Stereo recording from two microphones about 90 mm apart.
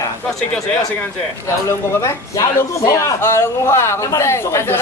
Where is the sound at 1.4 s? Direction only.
30° left (ahead or behind).